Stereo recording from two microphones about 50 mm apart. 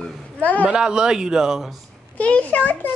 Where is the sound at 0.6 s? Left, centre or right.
Centre.